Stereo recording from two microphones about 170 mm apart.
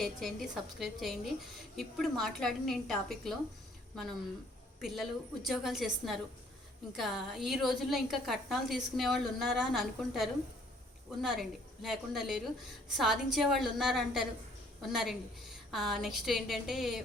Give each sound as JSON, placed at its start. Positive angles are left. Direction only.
{"t": 0.0, "sound": "a woman's voice", "side_deg": 0}
{"t": 4.8, "sound": "a woman's voice", "side_deg": 0}